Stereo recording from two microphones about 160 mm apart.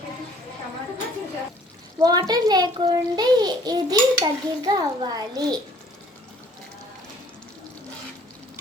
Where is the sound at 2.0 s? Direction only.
25° right (ahead or behind).